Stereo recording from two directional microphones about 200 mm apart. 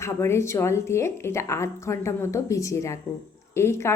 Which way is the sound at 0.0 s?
15° left (ahead or behind).